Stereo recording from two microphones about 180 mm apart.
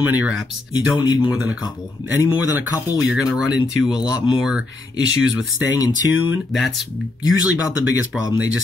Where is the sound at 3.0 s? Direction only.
5° right (ahead or behind).